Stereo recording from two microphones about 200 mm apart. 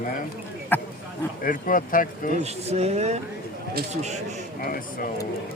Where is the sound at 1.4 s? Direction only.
45° left (ahead or behind).